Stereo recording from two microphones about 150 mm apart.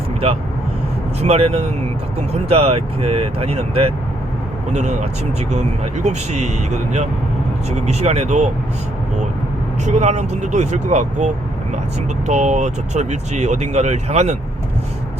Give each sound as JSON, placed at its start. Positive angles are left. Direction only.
{"t": 1.2, "sound": "speech", "side_deg": -45}
{"t": 9.8, "sound": "speech", "side_deg": -50}